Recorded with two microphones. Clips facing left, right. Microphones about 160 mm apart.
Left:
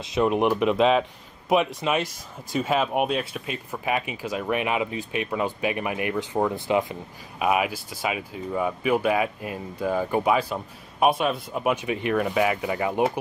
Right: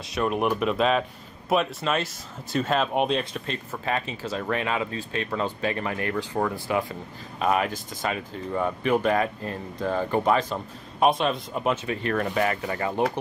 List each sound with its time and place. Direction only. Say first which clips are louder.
0.0 s speech: left 3 dB; 20° left (ahead or behind)
7.4 s speech: left 1 dB; 10° left (ahead or behind)